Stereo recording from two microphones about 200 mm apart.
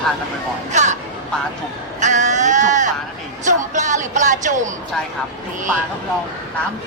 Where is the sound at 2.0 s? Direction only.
35° right (ahead or behind).